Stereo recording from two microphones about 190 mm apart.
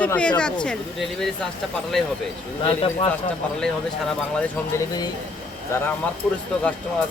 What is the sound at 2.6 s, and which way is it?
Speech, 30° left (ahead or behind).